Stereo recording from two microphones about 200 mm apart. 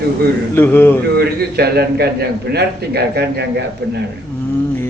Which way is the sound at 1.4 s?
50° right (ahead or behind).